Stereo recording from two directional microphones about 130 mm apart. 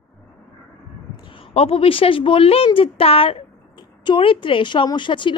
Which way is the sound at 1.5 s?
50° left (ahead or behind).